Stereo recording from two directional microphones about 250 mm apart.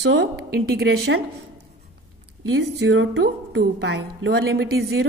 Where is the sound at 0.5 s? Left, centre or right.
Right.